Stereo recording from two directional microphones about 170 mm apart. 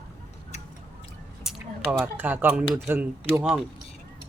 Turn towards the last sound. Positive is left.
turn(degrees=-5)  # may be behind; listen again after turning